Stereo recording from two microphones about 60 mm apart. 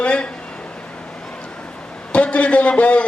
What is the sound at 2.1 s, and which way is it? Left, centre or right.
Speech, left.